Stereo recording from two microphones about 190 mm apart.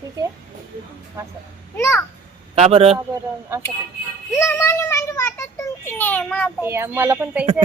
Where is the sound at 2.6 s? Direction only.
35° right (ahead or behind).